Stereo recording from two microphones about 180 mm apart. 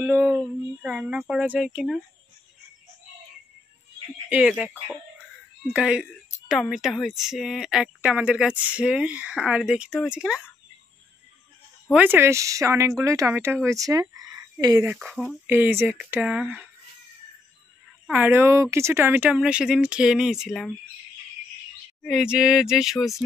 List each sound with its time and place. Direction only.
0.0 s a sound: 10° right (ahead or behind)
0.8 s a woman's voice: 5° right (ahead or behind)
4.3 s a woman's voice: 5° right (ahead or behind)
11.9 s speech: 10° right (ahead or behind)
15.0 s a woman's voice: centre (ahead or behind)
15.5 s speech: 10° right (ahead or behind)
18.0 s a woman's voice: 10° right (ahead or behind)
22.0 s a woman's voice: 5° right (ahead or behind)